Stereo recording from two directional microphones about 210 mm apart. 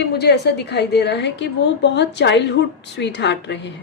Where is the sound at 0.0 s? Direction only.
50° left (ahead or behind).